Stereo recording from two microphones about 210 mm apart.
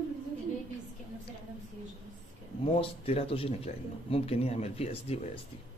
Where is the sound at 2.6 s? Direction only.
30° left (ahead or behind).